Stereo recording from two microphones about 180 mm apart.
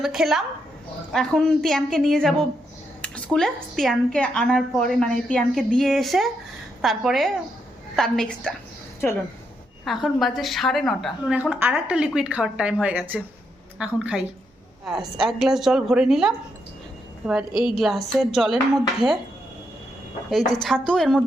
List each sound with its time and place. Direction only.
0.0 s a woman's voice: centre (ahead or behind)
17.5 s a woman's voice: 25° left (ahead or behind)
17.7 s a woman's voice: centre (ahead or behind)
20.6 s a woman's voice: 5° left (ahead or behind)